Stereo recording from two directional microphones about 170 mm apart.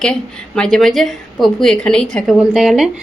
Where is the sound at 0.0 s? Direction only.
5° left (ahead or behind).